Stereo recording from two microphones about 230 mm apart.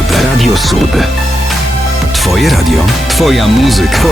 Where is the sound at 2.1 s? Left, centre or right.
Centre.